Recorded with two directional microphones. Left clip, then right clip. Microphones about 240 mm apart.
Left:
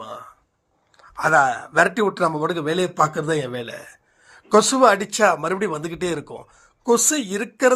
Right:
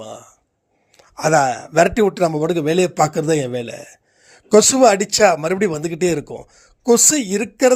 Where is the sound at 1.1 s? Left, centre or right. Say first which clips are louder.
Right 1 dB; right.